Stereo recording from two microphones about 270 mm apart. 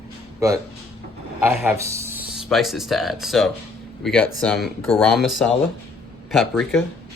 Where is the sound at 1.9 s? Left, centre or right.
Centre.